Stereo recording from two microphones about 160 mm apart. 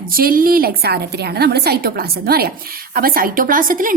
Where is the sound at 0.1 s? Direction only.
65° right (ahead or behind).